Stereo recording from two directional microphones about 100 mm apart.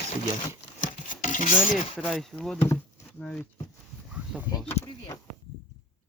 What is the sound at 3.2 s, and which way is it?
Speech, 15° left (ahead or behind).